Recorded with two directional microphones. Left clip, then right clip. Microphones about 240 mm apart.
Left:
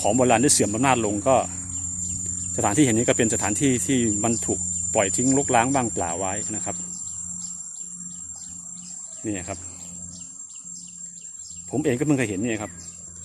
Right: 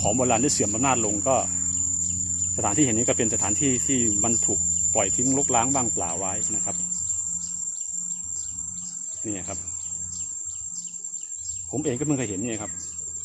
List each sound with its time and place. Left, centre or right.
0.0 s speech: left
2.6 s speech: left
9.2 s speech: left
11.7 s speech: left